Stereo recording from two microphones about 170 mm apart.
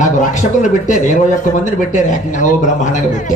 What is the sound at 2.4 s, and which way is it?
Speech, 45° left (ahead or behind).